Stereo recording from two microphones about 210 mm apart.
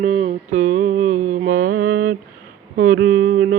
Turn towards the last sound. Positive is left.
turn(degrees=-50)  # may be behind; listen again after turning